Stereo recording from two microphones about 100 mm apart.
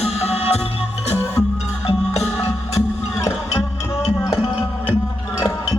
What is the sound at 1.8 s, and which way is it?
Music, 90° left.